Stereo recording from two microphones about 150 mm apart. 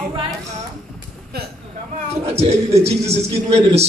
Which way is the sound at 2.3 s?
45° right (ahead or behind).